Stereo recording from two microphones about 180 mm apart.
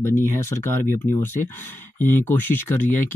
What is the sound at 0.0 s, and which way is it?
Speech, 15° left (ahead or behind).